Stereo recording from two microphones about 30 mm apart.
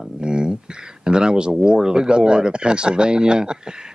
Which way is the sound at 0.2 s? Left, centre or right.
Right.